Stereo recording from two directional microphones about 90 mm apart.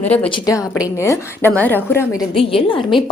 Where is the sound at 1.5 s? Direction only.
20° left (ahead or behind).